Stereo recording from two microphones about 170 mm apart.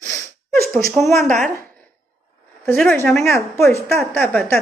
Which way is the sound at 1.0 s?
15° left (ahead or behind).